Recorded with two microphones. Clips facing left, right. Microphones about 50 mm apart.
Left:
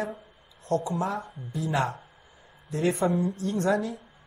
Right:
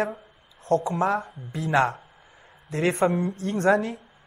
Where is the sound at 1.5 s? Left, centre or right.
Right.